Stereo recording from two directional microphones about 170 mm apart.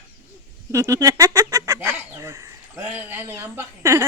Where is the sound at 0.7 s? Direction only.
20° right (ahead or behind).